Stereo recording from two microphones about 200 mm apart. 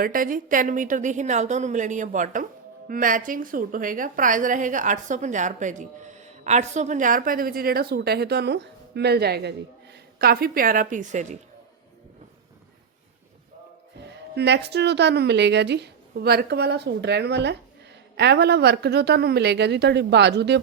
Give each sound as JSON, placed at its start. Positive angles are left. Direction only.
{"t": 0.0, "sound": "a woman's voice", "side_deg": -45}
{"t": 14.0, "sound": "a woman's voice", "side_deg": -60}